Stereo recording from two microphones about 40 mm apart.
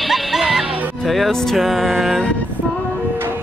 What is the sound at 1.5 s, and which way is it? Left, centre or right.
Music, centre.